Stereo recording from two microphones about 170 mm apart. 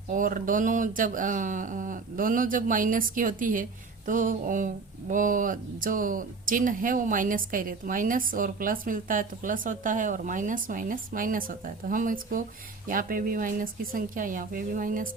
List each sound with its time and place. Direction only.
0.1 s speech: 55° right (ahead or behind)